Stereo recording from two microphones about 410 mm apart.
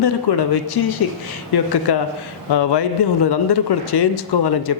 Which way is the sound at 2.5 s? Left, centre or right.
Left.